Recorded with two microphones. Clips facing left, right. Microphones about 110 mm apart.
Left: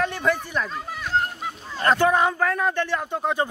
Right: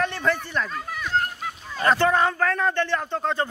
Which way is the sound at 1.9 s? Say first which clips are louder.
Left 1 dB; 15° left (ahead or behind).